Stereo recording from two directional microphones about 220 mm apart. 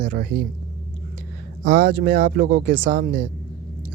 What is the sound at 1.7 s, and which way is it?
Speech, 45° right (ahead or behind).